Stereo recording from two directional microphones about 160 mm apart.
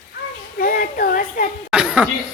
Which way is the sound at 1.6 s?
5° right (ahead or behind).